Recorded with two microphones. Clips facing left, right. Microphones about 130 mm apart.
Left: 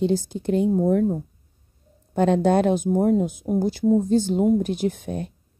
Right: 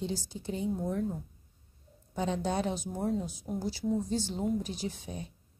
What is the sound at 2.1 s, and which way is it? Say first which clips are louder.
A woman's voice: left 13 dB; 65° left (ahead or behind).